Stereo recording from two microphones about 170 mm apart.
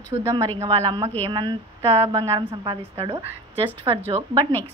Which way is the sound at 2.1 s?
20° right (ahead or behind).